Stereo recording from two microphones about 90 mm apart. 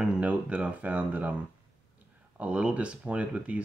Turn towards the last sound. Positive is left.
turn(degrees=-15)  # may be behind; listen again after turning